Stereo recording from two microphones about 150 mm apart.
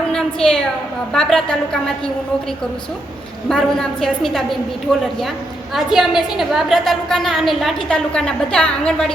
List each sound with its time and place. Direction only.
0.1 s a woman's voice: 5° left (ahead or behind)
3.5 s a woman's voice: 5° left (ahead or behind)